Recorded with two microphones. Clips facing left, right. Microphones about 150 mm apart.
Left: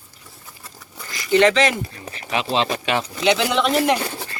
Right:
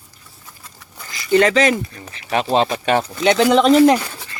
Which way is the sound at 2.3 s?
45° right (ahead or behind).